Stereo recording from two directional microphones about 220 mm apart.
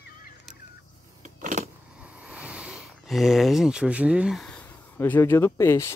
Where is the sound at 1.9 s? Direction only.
5° right (ahead or behind); by 5.9 s 10° left (ahead or behind).